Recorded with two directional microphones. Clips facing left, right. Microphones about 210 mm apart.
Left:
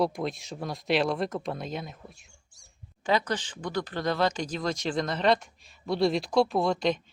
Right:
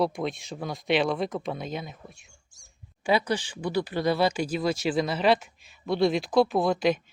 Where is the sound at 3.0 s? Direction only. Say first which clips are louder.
Right 2 dB; 10° right (ahead or behind).